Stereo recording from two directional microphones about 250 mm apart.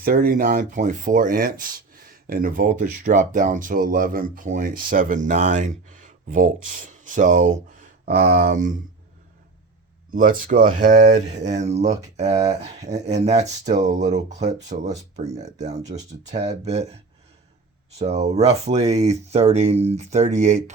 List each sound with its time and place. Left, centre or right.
0.0 s speech: right
10.1 s speech: right
18.0 s speech: right